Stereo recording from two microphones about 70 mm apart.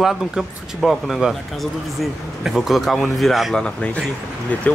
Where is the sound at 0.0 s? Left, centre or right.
Centre.